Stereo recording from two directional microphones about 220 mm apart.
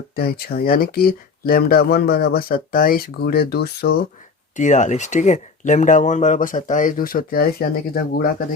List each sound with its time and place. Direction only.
0.2 s speech: 45° left (ahead or behind)
4.5 s speech: 35° left (ahead or behind)